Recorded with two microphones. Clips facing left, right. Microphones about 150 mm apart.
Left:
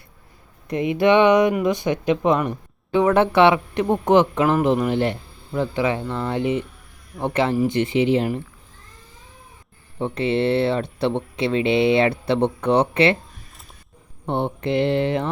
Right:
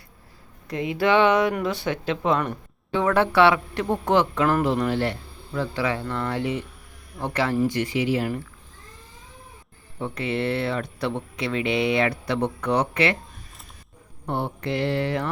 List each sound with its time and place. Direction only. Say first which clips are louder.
0.7 s speech: left 4 dB; 20° left (ahead or behind)
10.0 s speech: left 6 dB; 25° left (ahead or behind)
14.3 s speech: left 4 dB; 20° left (ahead or behind)